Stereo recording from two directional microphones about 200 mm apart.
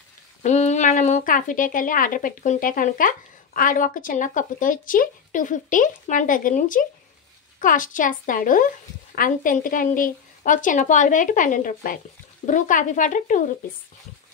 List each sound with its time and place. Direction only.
0.4 s speech: 35° left (ahead or behind)